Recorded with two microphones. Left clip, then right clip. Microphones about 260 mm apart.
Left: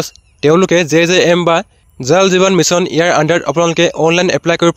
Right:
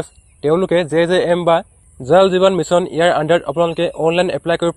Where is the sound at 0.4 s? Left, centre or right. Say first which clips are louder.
Left 5 dB; left.